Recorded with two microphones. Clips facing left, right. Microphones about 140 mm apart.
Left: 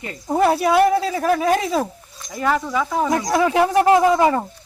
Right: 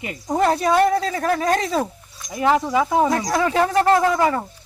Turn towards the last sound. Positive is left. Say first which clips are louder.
# left 3 dB
turn(degrees=20)  # may be behind; listen again after turning